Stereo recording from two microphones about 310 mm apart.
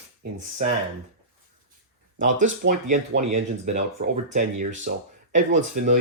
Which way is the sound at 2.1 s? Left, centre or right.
Right.